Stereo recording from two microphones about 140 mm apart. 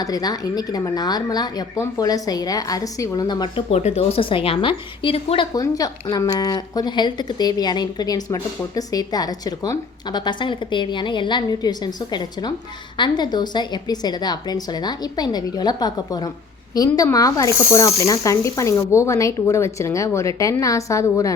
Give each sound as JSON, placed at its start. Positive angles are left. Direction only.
{"t": 0.0, "sound": "speech", "side_deg": 25}
{"t": 3.8, "sound": "a woman's voice", "side_deg": 50}
{"t": 5.5, "sound": "speech", "side_deg": 25}